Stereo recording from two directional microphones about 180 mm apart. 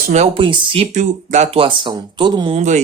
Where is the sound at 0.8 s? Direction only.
45° right (ahead or behind); by 2.5 s 25° right (ahead or behind).